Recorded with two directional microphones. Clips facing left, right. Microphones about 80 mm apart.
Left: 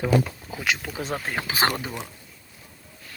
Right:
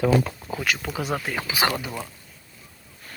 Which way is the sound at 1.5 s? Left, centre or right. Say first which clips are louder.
Even; left.